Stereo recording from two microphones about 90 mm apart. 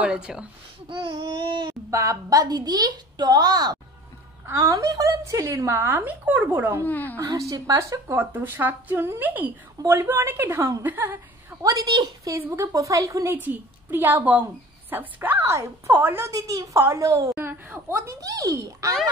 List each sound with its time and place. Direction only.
0.0 s speech: 10° right (ahead or behind)
0.8 s babbling: 65° right (ahead or behind)
1.9 s a woman's voice: 40° right (ahead or behind)
5.8 s a woman's voice: 20° right (ahead or behind)
6.8 s speech: 20° left (ahead or behind)
7.2 s speech: 35° right (ahead or behind)
8.2 s a woman's voice: 20° right (ahead or behind)
9.8 s a woman's voice: 30° right (ahead or behind)
11.6 s a woman's voice: 45° right (ahead or behind)
12.4 s speech: 40° right (ahead or behind)
13.3 s a woman's voice: 20° right (ahead or behind)
16.3 s speech: 40° right (ahead or behind)
17.4 s speech: 25° right (ahead or behind); by 18.9 s 40° right (ahead or behind)